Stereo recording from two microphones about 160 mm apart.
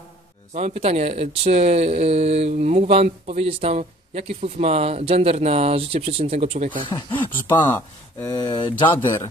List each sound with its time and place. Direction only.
0.6 s speech: 40° right (ahead or behind)
6.9 s speech: 15° left (ahead or behind); by 8.9 s 30° left (ahead or behind)